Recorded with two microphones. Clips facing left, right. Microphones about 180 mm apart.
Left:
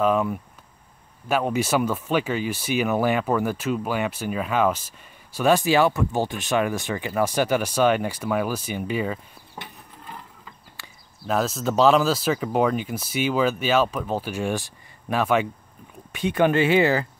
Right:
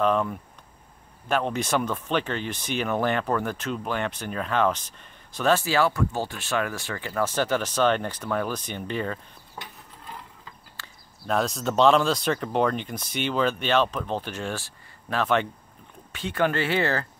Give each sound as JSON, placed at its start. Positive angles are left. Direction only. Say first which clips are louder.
{"t": 0.0, "sound": "speech", "louder": "left 2 dB", "side_deg": 5}
{"t": 10.8, "sound": "speech", "louder": "left 2 dB", "side_deg": 5}